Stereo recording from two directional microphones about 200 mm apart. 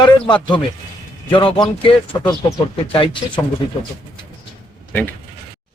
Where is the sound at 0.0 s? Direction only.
25° left (ahead or behind).